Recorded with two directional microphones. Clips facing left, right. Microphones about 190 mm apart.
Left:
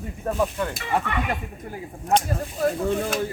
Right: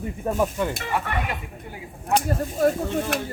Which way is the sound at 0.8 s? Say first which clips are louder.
Left 1 dB; 45° right (ahead or behind).